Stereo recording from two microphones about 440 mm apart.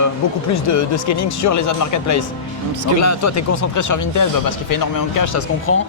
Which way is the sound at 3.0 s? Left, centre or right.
Left.